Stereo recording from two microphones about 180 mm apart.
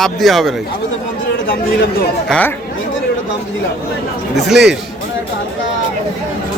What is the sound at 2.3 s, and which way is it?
Speech, 10° left (ahead or behind).